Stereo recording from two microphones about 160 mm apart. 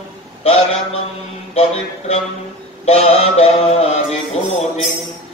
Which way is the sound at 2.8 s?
40° left (ahead or behind).